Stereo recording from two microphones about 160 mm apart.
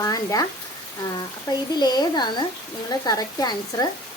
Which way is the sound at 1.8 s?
25° left (ahead or behind).